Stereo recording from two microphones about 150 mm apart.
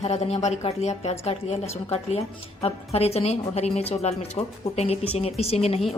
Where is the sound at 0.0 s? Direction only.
45° left (ahead or behind).